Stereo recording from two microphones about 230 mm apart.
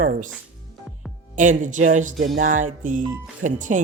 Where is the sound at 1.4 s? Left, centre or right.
Right.